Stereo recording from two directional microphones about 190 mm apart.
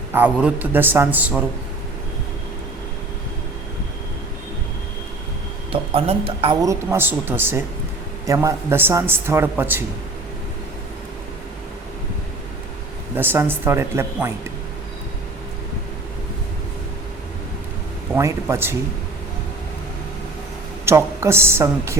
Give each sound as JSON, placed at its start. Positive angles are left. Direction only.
{"t": 0.1, "sound": "speech", "side_deg": -10}
{"t": 5.7, "sound": "speech", "side_deg": -30}
{"t": 13.1, "sound": "speech", "side_deg": -10}
{"t": 18.1, "sound": "speech", "side_deg": -15}
{"t": 20.8, "sound": "speech", "side_deg": -15}